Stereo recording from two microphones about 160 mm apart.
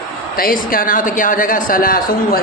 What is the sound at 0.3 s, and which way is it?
Speech, 65° left (ahead or behind).